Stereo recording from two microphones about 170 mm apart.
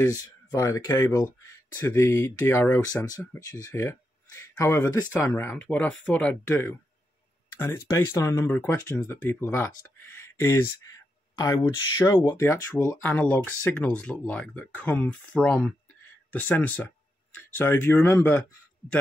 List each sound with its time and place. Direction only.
0.0 s speech: 20° left (ahead or behind)